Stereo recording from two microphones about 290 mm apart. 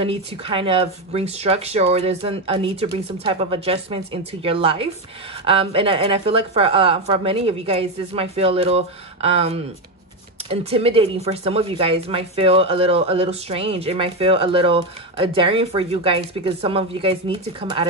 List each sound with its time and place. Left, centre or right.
0.0 s speech: centre